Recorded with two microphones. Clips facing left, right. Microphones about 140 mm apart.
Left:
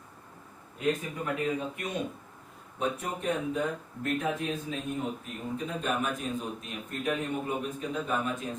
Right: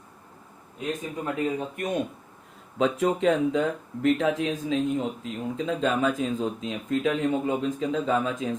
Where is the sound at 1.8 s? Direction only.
50° right (ahead or behind).